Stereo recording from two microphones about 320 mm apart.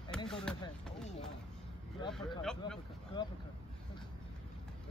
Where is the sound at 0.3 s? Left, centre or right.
Centre.